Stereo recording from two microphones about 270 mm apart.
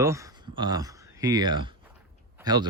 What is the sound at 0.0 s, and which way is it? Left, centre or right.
Speech, centre.